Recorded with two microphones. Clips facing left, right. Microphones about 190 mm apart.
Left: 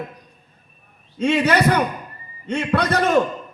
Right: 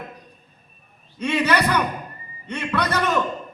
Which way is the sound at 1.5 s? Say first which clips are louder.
Left 3 dB; 50° left (ahead or behind).